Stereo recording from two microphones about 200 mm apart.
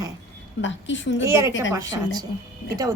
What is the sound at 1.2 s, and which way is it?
Speech, 15° right (ahead or behind).